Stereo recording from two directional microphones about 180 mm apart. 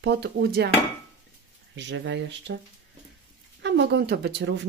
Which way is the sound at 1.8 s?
80° right.